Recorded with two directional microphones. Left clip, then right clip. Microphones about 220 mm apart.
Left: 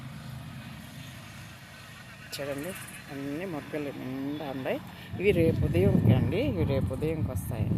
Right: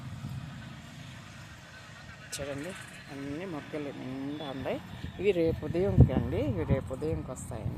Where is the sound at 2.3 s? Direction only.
5° left (ahead or behind).